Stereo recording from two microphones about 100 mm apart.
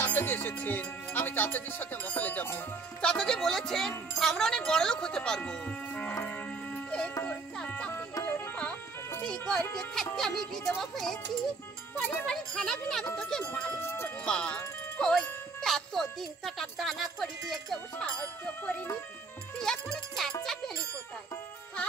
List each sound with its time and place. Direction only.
0.0 s speech: 20° left (ahead or behind)
3.0 s speech: 10° left (ahead or behind)
7.2 s music: 15° left (ahead or behind)
9.5 s speech: 5° left (ahead or behind)
11.9 s speech: 20° left (ahead or behind)
12.3 s speech: 5° left (ahead or behind); by 14.1 s 20° left (ahead or behind)
14.2 s speech: 10° left (ahead or behind)
18.2 s speech: 15° left (ahead or behind)